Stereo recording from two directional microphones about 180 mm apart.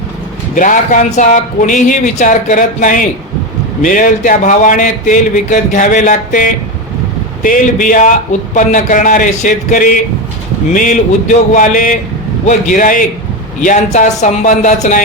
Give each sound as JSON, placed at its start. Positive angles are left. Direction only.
{"t": 0.5, "sound": "a man's voice", "side_deg": 45}